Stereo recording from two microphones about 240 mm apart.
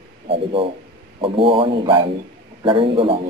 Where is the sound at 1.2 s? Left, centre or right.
Right.